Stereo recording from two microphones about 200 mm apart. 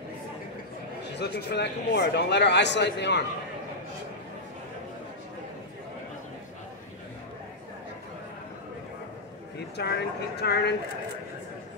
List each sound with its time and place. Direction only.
1.1 s speech: 55° left (ahead or behind)
9.8 s speech: 55° left (ahead or behind)